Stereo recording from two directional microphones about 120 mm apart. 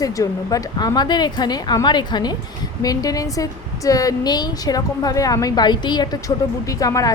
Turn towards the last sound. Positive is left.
turn(degrees=30)  # may be behind; listen again after turning